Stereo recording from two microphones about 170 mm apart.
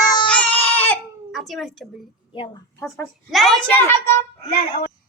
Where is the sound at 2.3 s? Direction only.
30° left (ahead or behind).